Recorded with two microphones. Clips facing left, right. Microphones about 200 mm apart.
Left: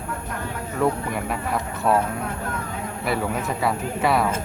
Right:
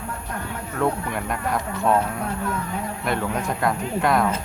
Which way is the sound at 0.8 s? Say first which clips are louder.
Left 1 dB; 5° left (ahead or behind).